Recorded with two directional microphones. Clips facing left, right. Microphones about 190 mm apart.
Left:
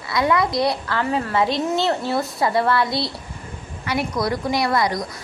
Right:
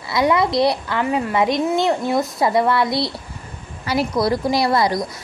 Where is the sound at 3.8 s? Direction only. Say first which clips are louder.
Right 4 dB; 30° right (ahead or behind).